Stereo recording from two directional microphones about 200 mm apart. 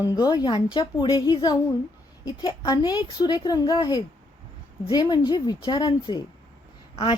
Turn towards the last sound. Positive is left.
turn(degrees=30)  # may be behind; listen again after turning